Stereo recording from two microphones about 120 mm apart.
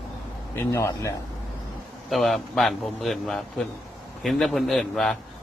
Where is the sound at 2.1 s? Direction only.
Centre (ahead or behind).